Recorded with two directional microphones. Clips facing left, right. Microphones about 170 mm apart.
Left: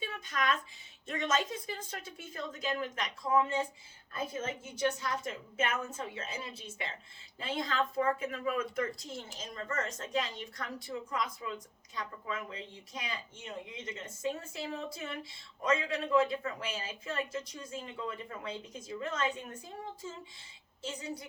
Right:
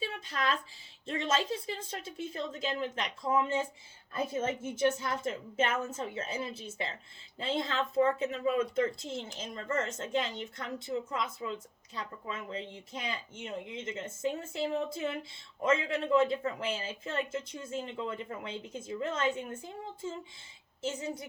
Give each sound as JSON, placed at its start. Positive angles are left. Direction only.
{"t": 0.0, "sound": "speech", "side_deg": -30}
{"t": 20.8, "sound": "speech", "side_deg": -25}